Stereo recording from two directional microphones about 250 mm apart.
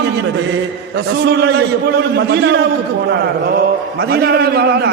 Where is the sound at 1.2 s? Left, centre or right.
Right.